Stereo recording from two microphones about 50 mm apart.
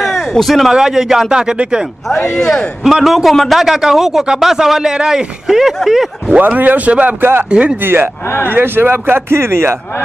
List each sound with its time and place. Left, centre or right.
0.0 s a sound: centre
0.7 s speech: centre
2.3 s a man's voice: centre
2.8 s a man's voice: centre
6.4 s a man's voice: right